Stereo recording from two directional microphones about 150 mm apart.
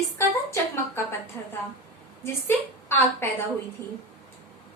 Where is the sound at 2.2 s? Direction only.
15° left (ahead or behind).